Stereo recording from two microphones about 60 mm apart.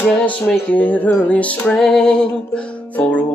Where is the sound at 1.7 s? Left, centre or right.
Centre.